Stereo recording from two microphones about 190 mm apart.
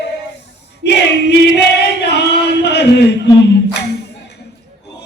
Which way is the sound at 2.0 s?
60° left (ahead or behind).